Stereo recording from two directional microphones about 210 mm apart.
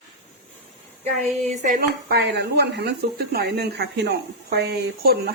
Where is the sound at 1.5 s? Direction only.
40° right (ahead or behind).